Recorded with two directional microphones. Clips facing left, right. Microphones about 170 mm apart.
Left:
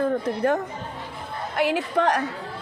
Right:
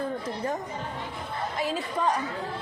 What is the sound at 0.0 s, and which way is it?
A woman's voice, 65° left (ahead or behind).